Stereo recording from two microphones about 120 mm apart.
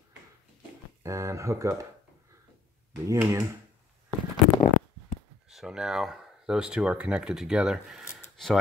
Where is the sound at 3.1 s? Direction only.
25° right (ahead or behind).